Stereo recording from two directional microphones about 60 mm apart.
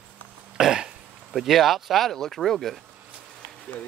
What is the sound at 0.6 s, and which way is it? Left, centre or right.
Cough, centre.